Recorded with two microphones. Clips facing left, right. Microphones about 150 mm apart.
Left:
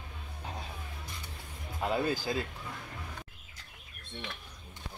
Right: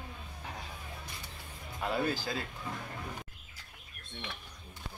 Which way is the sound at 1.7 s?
20° left (ahead or behind).